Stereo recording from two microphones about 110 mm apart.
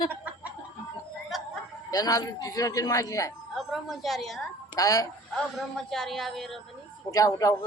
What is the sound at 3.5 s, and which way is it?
Speech, centre (ahead or behind).